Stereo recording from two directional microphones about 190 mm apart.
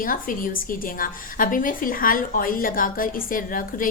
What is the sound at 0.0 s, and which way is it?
A woman's voice, 45° left (ahead or behind).